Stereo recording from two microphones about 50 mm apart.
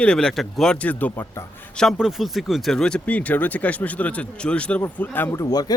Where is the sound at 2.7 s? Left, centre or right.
Centre.